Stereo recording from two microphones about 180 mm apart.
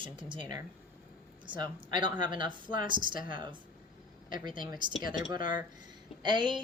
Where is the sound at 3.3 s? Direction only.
25° right (ahead or behind).